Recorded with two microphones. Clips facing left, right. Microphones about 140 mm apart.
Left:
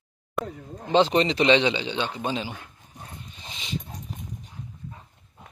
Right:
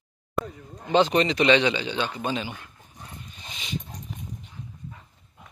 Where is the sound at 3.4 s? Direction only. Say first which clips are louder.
Left 1 dB; 25° left (ahead or behind).